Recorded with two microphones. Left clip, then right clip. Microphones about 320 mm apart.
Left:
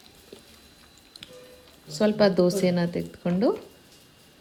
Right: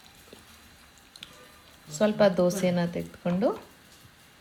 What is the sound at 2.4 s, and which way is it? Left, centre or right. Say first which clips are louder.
Speech: left 2 dB; left.